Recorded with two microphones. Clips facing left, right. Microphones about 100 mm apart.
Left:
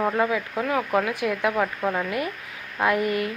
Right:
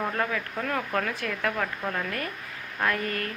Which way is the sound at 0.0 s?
15° left (ahead or behind).